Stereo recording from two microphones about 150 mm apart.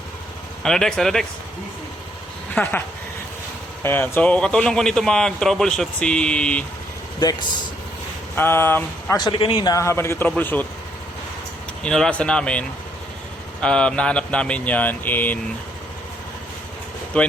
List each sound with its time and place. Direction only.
0.6 s speech: 5° left (ahead or behind)
2.6 s speech: 15° left (ahead or behind)
3.8 s speech: 15° left (ahead or behind)
7.2 s a man's voice: 25° left (ahead or behind)
8.4 s speech: 15° left (ahead or behind)
9.1 s a man's voice: 30° left (ahead or behind); by 10.7 s 10° left (ahead or behind)
11.8 s speech: 5° left (ahead or behind)
17.1 s speech: 10° left (ahead or behind)